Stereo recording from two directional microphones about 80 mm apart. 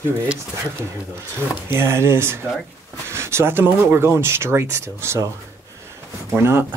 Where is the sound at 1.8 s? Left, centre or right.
Right.